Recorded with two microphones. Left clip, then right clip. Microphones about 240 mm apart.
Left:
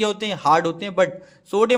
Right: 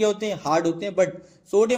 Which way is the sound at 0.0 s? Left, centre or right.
Left.